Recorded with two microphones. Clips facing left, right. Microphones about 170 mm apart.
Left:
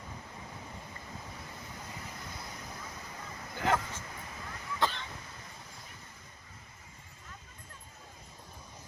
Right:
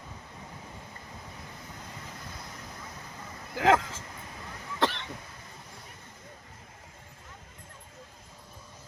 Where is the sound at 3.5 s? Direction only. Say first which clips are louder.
Right 7 dB; 90° right.